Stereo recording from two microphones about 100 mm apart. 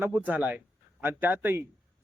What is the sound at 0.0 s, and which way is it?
Speech, 20° right (ahead or behind).